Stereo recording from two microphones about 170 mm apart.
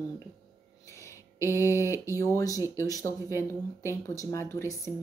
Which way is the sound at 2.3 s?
20° left (ahead or behind).